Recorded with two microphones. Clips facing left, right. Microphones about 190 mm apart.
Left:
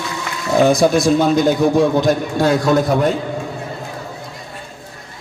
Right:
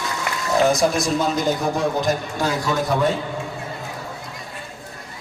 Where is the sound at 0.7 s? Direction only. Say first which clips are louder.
Left 6 dB; 60° left (ahead or behind).